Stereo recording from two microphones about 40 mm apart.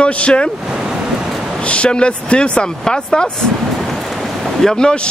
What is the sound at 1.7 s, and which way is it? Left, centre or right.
Speech, left.